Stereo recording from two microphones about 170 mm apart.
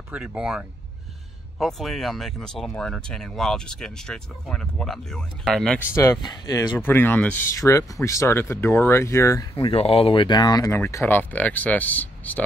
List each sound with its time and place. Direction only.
0.1 s speech: 5° right (ahead or behind)
5.9 s speech: 15° left (ahead or behind)
6.8 s speech: 10° left (ahead or behind)
9.6 s speech: 35° left (ahead or behind); by 12.4 s 10° left (ahead or behind)